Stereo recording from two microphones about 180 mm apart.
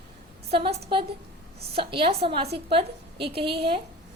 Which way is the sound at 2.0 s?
30° right (ahead or behind).